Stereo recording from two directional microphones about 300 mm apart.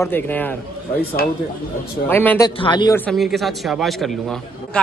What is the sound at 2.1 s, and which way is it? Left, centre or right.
A man's voice, centre.